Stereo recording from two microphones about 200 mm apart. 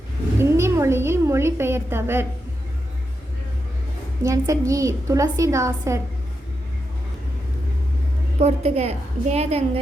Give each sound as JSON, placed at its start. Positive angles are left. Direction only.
{"t": 0.3, "sound": "a woman's voice", "side_deg": -15}
{"t": 4.2, "sound": "a woman's voice", "side_deg": -15}
{"t": 8.4, "sound": "a woman's voice", "side_deg": -35}